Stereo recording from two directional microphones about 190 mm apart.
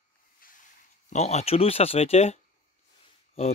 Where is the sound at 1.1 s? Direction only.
35° left (ahead or behind).